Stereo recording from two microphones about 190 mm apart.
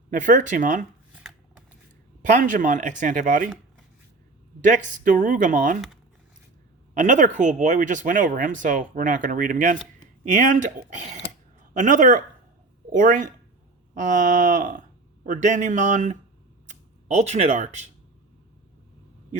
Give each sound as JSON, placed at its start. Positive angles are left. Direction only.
{"t": 0.1, "sound": "speech", "side_deg": -45}
{"t": 1.1, "sound": "shuffling cards", "side_deg": 0}
{"t": 2.2, "sound": "speech", "side_deg": -40}
{"t": 4.6, "sound": "speech", "side_deg": -45}
{"t": 7.0, "sound": "speech", "side_deg": -40}